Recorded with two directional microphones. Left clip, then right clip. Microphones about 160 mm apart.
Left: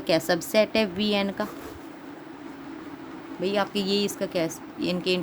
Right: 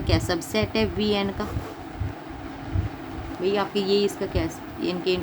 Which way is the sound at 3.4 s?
45° left (ahead or behind).